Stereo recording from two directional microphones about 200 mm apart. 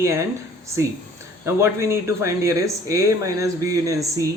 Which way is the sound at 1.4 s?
15° right (ahead or behind).